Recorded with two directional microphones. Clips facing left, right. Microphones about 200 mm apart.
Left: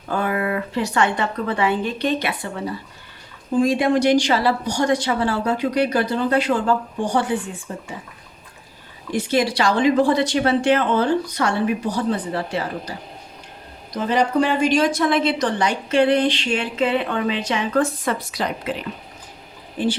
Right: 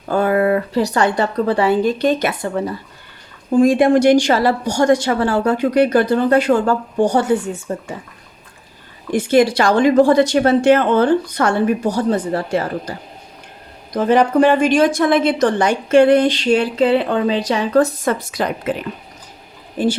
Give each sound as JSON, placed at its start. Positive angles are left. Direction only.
{"t": 0.1, "sound": "a woman's voice", "side_deg": -40}
{"t": 9.1, "sound": "a woman's voice", "side_deg": -50}
{"t": 13.9, "sound": "a woman's voice", "side_deg": -55}